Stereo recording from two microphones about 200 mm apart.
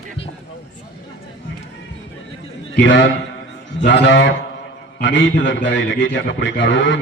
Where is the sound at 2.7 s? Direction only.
65° left (ahead or behind).